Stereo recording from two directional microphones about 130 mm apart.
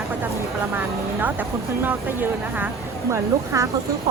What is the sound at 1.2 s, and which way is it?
Speech, 15° right (ahead or behind).